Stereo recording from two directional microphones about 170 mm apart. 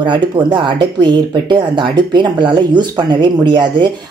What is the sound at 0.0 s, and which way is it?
Speech, 30° right (ahead or behind).